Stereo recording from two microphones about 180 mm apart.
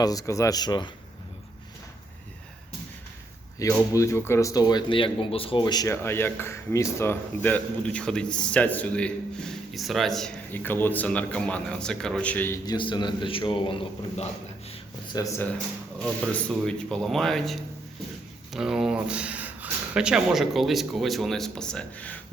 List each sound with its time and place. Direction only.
0.0 s a man's voice: 20° left (ahead or behind)
3.6 s speech: 15° left (ahead or behind)
12.6 s a man's voice: 25° left (ahead or behind)
15.1 s speech: 15° left (ahead or behind)
16.3 s speech: 5° left (ahead or behind)